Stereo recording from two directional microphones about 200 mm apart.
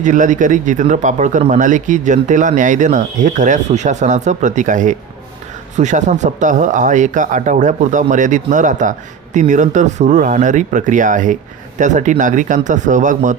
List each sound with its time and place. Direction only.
0.0 s speech: 40° right (ahead or behind)